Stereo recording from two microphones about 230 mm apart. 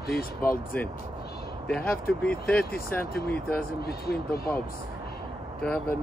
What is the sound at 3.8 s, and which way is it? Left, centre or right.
Speech, left.